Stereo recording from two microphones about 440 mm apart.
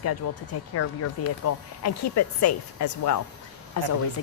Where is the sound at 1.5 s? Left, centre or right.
Left.